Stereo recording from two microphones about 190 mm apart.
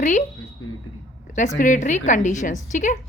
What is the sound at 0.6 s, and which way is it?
Speech, 90° left.